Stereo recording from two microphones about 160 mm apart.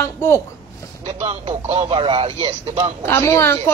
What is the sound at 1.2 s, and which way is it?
Speech, 40° right (ahead or behind).